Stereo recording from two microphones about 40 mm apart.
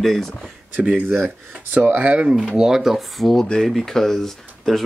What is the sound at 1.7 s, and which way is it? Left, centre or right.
Speech, right.